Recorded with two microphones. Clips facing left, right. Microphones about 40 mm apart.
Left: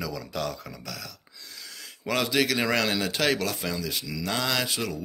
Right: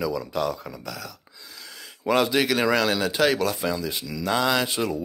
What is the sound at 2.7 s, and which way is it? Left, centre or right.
Speech, centre.